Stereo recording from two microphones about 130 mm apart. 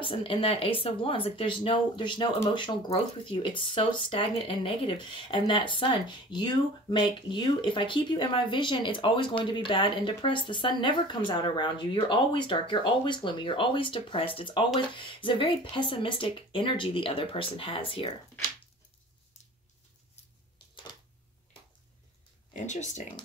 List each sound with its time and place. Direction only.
0.0 s speech: 45° left (ahead or behind)
22.5 s speech: 65° left (ahead or behind)